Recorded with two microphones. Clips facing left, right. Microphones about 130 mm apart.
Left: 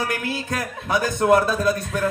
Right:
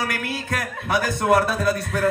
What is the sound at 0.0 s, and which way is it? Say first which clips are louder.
A man's voice: left 1 dB; 25° left (ahead or behind).